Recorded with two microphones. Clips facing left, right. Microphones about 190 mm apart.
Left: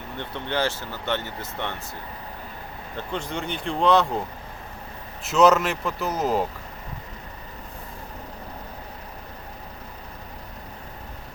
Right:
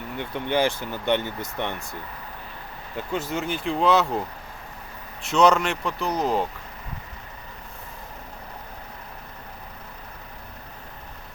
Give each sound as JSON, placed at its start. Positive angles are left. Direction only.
{"t": 0.2, "sound": "speech", "side_deg": -15}
{"t": 2.9, "sound": "speech", "side_deg": -5}
{"t": 5.2, "sound": "speech", "side_deg": 5}